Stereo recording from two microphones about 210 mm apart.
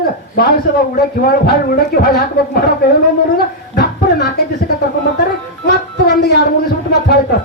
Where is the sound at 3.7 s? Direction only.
50° left (ahead or behind).